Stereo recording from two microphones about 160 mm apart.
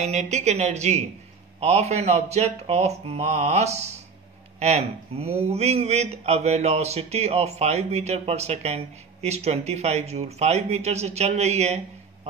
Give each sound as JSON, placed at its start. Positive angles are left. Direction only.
{"t": 0.0, "sound": "a man's voice", "side_deg": -45}